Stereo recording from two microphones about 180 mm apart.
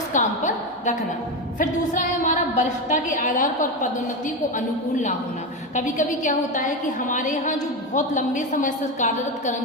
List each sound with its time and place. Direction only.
0.1 s a sound: 45° left (ahead or behind)
1.5 s a woman's voice: 45° left (ahead or behind)
5.7 s a woman's voice: 45° left (ahead or behind)